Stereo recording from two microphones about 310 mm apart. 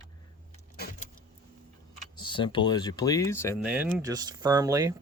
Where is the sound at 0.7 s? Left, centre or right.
Left.